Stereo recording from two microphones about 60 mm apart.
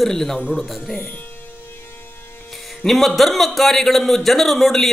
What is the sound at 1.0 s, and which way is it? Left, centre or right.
Speech, left.